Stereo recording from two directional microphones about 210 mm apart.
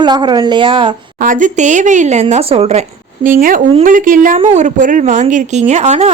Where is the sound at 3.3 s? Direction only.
40° right (ahead or behind).